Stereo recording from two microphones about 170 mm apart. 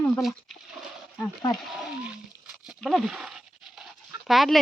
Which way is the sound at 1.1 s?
25° left (ahead or behind).